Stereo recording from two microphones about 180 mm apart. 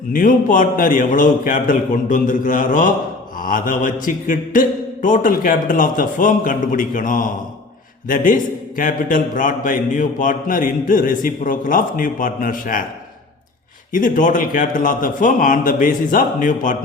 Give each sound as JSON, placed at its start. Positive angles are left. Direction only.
{"t": 0.1, "sound": "a man's voice", "side_deg": 50}
{"t": 13.9, "sound": "a man's voice", "side_deg": 50}